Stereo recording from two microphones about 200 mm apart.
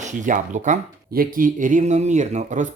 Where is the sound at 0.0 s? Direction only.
40° right (ahead or behind).